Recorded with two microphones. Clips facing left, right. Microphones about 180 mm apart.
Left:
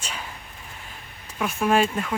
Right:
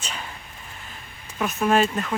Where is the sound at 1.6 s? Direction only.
10° left (ahead or behind).